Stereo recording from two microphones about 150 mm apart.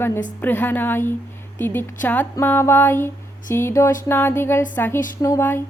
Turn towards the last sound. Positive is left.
turn(degrees=15)  # may be behind; listen again after turning